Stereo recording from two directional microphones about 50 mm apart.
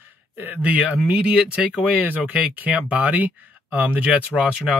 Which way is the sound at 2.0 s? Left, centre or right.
Right.